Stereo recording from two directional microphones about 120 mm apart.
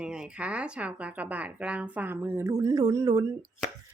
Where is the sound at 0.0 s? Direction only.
5° right (ahead or behind).